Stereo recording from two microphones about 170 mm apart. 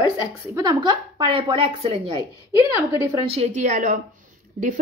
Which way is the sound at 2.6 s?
20° right (ahead or behind).